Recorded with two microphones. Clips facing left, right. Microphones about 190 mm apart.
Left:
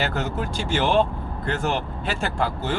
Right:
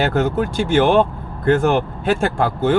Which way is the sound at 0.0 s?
50° right (ahead or behind).